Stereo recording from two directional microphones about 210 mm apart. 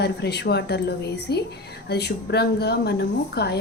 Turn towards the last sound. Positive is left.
turn(degrees=50)  # may be behind; listen again after turning